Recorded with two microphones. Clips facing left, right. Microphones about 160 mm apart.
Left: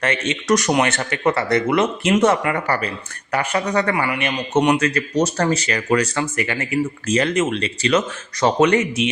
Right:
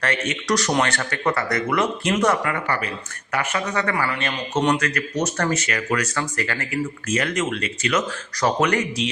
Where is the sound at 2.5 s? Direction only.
35° left (ahead or behind).